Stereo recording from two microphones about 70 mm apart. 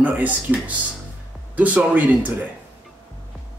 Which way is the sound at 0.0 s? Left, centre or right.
Right.